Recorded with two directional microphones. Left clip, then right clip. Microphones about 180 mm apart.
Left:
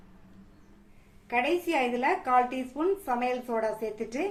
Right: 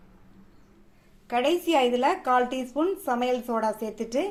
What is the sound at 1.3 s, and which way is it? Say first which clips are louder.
A woman's voice: right 4 dB; 35° right (ahead or behind).